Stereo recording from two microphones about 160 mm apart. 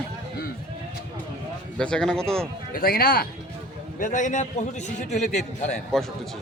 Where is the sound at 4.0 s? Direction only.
50° left (ahead or behind).